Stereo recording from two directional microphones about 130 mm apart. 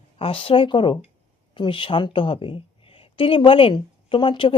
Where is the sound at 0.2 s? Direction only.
45° left (ahead or behind).